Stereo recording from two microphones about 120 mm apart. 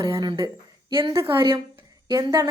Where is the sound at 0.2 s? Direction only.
40° right (ahead or behind).